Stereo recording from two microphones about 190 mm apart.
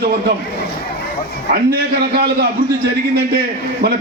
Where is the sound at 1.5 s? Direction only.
55° right (ahead or behind).